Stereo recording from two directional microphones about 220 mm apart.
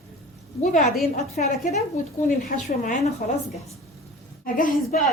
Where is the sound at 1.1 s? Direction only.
30° left (ahead or behind).